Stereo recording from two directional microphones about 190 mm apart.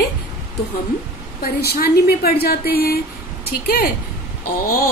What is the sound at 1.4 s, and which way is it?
Speech, 55° left (ahead or behind).